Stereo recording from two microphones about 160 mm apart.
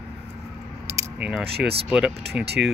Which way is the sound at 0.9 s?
15° right (ahead or behind).